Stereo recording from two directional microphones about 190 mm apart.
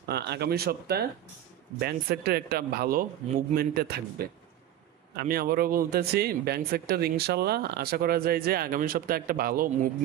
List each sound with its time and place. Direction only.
0.0 s speech: 60° right (ahead or behind)